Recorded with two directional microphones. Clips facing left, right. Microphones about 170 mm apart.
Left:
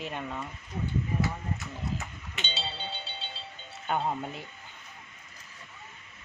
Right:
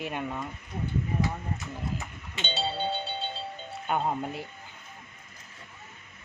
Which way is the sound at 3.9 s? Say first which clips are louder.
Right 1 dB; 10° right (ahead or behind).